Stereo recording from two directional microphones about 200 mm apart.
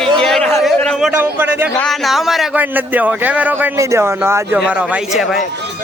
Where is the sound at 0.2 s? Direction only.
Centre (ahead or behind).